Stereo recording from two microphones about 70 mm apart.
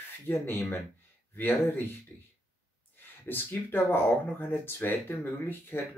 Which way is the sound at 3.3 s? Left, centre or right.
Left.